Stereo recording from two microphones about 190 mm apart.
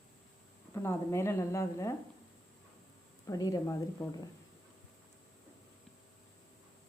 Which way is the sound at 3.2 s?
20° left (ahead or behind).